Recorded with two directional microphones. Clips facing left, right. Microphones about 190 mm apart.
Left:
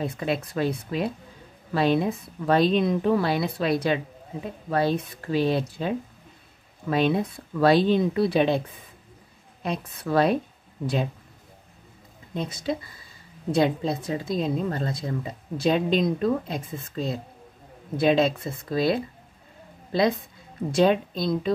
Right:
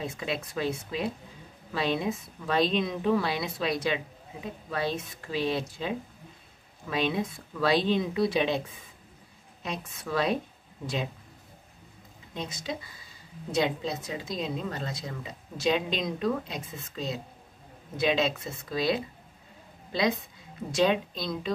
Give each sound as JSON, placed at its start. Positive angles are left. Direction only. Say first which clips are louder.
{"t": 0.0, "sound": "a woman's voice", "louder": "left 6 dB", "side_deg": 55}
{"t": 9.6, "sound": "speech", "louder": "left 6 dB", "side_deg": 55}
{"t": 12.4, "sound": "a woman's voice", "louder": "left 7 dB", "side_deg": 55}